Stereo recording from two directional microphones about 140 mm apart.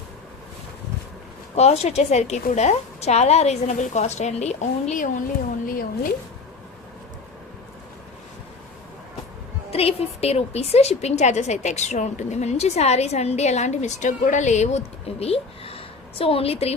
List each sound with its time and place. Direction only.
1.5 s a woman's voice: 50° left (ahead or behind)
5.6 s speech: 90° left
9.7 s a woman's voice: 45° left (ahead or behind)